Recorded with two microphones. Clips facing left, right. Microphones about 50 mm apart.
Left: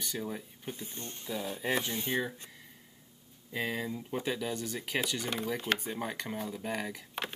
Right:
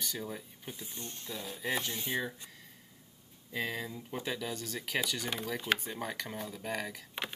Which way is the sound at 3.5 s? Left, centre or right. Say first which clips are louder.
Left 2 dB; centre.